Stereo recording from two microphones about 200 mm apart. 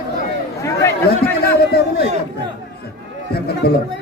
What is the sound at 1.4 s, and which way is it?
Speech, 50° left (ahead or behind).